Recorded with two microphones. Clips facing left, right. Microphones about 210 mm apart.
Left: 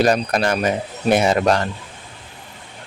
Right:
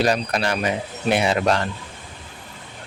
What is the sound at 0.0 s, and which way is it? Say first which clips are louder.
Speech: left 4 dB; 45° left (ahead or behind).